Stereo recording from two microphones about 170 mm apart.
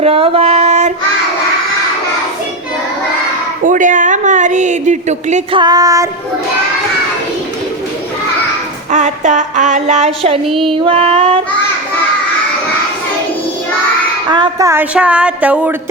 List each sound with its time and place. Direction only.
0.0 s female singing: 35° right (ahead or behind)
3.6 s a woman's voice: 50° right (ahead or behind)
5.5 s child singing: 25° right (ahead or behind)
8.9 s a woman's voice: 45° right (ahead or behind)
10.6 s female singing: 35° right (ahead or behind)
14.3 s child singing: 25° right (ahead or behind)
14.7 s speech: 10° right (ahead or behind)